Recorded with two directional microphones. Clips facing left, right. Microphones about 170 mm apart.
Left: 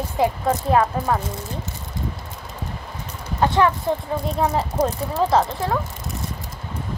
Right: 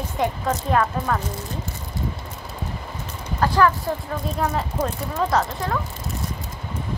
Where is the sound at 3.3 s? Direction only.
25° left (ahead or behind).